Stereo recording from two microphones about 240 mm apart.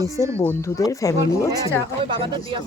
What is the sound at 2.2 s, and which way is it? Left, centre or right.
Speech, right.